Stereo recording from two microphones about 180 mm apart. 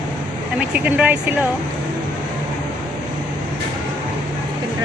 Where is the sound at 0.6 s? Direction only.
10° right (ahead or behind).